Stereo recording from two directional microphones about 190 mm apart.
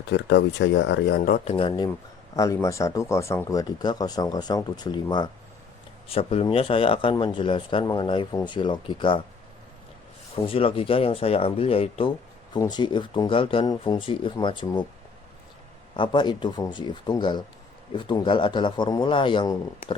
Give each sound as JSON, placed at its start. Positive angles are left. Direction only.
{"t": 0.1, "sound": "speech", "side_deg": 70}
{"t": 1.5, "sound": "speech", "side_deg": 25}
{"t": 10.4, "sound": "speech", "side_deg": 30}
{"t": 16.0, "sound": "speech", "side_deg": 25}